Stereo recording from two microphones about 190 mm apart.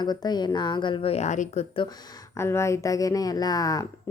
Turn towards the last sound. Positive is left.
turn(degrees=20)  # may be behind; listen again after turning